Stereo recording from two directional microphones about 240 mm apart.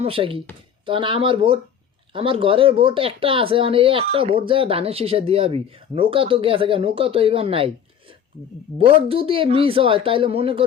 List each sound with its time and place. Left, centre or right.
0.0 s speech: right
8.8 s speech: right